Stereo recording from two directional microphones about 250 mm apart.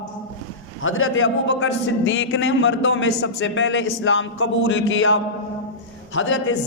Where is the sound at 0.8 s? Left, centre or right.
Left.